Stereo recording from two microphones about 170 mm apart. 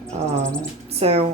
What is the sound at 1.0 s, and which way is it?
Speech, 35° right (ahead or behind).